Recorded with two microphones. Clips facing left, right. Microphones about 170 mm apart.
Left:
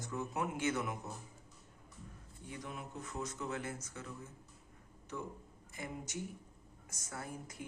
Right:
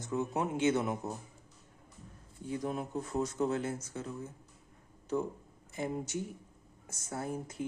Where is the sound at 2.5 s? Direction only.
35° right (ahead or behind).